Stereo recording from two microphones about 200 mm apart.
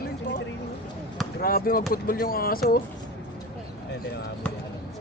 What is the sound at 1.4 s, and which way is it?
Speech, 45° left (ahead or behind).